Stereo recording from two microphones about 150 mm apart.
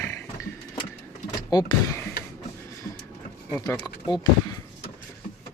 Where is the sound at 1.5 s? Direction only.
30° left (ahead or behind).